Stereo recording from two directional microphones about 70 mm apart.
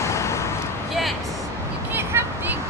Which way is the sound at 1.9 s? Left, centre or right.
Right.